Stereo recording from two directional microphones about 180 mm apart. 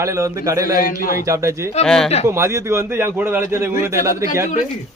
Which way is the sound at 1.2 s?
15° right (ahead or behind).